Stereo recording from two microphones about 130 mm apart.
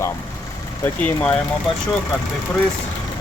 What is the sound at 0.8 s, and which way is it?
Speech, 10° left (ahead or behind).